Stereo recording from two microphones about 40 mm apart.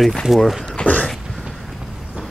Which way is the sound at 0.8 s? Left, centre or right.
Left.